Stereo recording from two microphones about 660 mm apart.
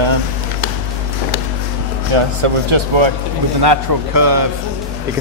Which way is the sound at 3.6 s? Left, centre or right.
Right.